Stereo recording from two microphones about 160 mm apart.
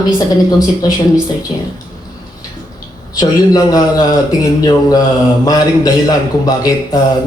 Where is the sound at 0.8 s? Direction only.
25° left (ahead or behind).